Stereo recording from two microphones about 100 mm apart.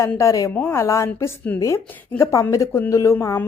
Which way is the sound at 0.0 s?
30° left (ahead or behind).